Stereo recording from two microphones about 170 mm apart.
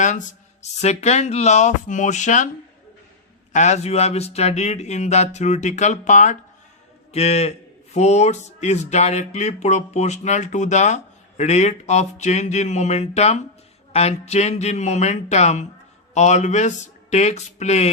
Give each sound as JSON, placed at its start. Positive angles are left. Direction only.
{"t": 0.8, "sound": "speech", "side_deg": 40}
{"t": 3.5, "sound": "speech", "side_deg": 40}